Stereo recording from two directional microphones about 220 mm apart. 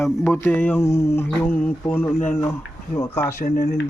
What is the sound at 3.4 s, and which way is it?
Speech, 40° left (ahead or behind).